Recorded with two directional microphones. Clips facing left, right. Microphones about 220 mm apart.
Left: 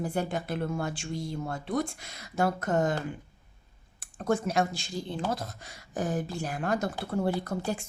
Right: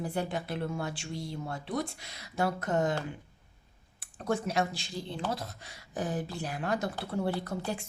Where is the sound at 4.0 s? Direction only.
45° left (ahead or behind).